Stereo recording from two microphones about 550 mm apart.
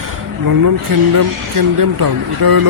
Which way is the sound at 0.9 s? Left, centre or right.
Right.